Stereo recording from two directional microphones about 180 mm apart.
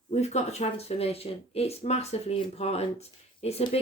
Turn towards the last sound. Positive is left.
turn(degrees=35)  # may be behind; listen again after turning